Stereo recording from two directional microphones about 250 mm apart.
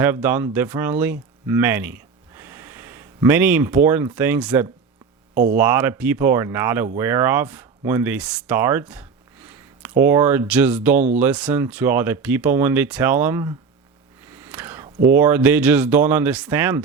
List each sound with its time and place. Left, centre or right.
0.0 s speech: centre
5.3 s speech: right
5.5 s speech: centre